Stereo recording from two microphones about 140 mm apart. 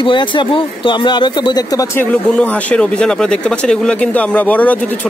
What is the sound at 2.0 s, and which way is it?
A man's voice, 10° left (ahead or behind).